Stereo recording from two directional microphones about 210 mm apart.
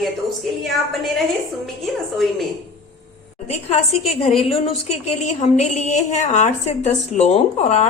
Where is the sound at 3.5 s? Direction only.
30° left (ahead or behind).